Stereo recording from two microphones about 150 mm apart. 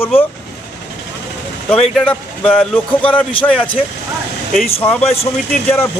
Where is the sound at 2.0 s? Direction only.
5° left (ahead or behind).